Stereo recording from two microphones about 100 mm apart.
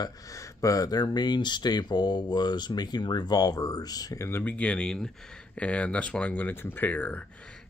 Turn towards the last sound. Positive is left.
turn(degrees=15)  # may be behind; listen again after turning